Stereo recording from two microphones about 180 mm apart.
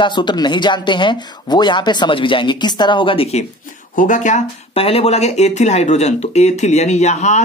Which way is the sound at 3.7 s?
45° left (ahead or behind).